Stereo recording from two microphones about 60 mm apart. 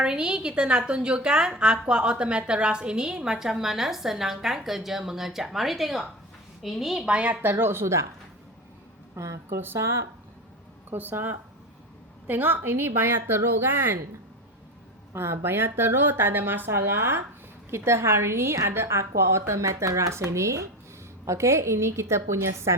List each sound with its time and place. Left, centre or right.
0.0 s a woman's voice: centre
7.1 s a woman's voice: right
7.5 s speech: right
9.1 s a woman's voice: right
9.5 s speech: right
9.7 s speech: right
10.9 s speech: right
15.1 s a woman's voice: right